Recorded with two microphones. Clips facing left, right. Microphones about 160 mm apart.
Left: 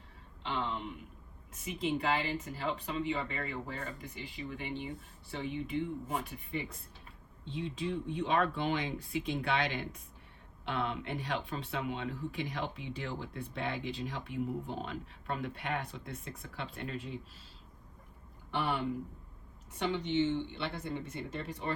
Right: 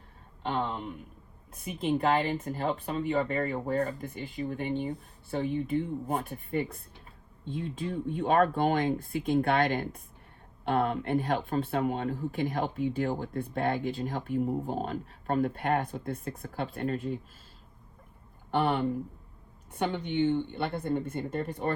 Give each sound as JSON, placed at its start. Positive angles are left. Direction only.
{"t": 0.4, "sound": "a sound", "side_deg": -50}
{"t": 1.6, "sound": "speech", "side_deg": -50}
{"t": 18.5, "sound": "speech", "side_deg": -50}